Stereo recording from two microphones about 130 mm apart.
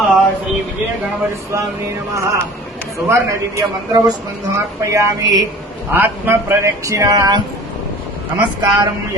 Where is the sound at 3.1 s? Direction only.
25° right (ahead or behind).